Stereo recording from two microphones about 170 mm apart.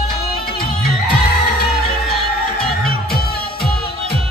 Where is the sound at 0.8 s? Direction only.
65° left (ahead or behind).